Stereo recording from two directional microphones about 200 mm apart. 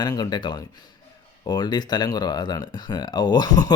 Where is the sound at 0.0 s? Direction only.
20° left (ahead or behind).